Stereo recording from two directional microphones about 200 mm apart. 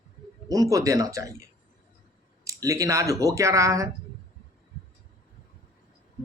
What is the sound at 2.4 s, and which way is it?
Speech, 15° right (ahead or behind).